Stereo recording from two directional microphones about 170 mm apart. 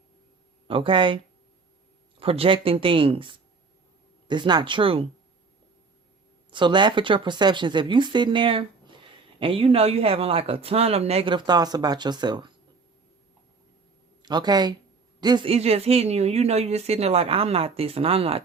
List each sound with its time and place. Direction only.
0.7 s speech: 30° right (ahead or behind)
6.5 s speech: 25° right (ahead or behind)
14.2 s speech: 25° right (ahead or behind)